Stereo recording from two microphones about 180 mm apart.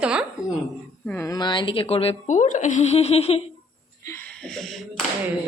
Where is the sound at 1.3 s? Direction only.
25° left (ahead or behind).